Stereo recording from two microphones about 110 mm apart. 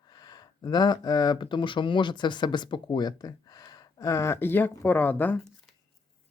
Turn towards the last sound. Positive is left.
turn(degrees=15)  # may be behind; listen again after turning